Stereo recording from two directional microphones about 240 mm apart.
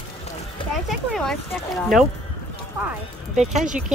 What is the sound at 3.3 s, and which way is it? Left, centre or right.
Speech, right.